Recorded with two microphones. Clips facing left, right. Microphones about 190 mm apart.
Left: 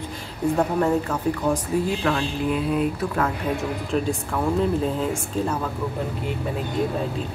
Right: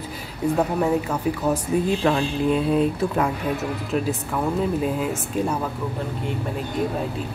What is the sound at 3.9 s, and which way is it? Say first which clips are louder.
Speech: even; 5° right (ahead or behind).